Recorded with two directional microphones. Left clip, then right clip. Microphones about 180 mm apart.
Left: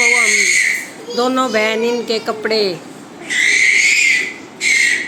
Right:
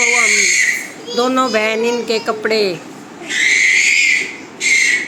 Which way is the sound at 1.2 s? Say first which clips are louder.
Right 1 dB; centre (ahead or behind).